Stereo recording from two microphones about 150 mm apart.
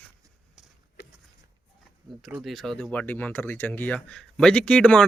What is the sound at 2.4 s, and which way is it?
Speech, centre (ahead or behind).